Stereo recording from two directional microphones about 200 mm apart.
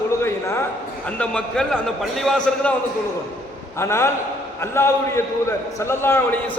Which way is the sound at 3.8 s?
15° left (ahead or behind).